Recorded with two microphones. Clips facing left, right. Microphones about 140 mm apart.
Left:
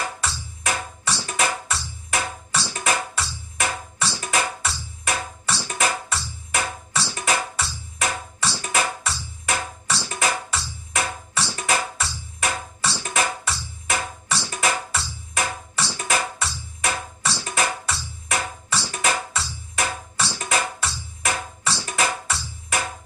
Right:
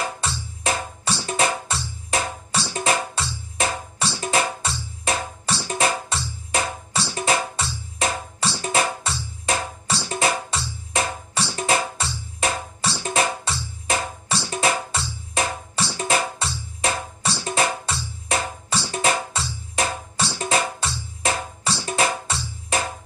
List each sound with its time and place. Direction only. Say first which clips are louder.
0.2 s music: right 2 dB; 30° right (ahead or behind)